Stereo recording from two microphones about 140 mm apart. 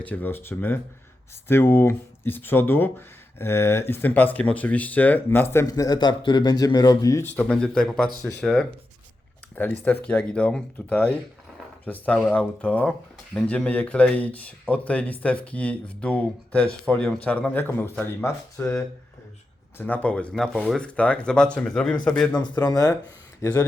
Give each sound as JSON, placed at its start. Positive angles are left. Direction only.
{"t": 0.0, "sound": "speech", "side_deg": 10}
{"t": 7.3, "sound": "speech", "side_deg": 10}
{"t": 9.8, "sound": "speech", "side_deg": 10}
{"t": 22.4, "sound": "speech", "side_deg": 30}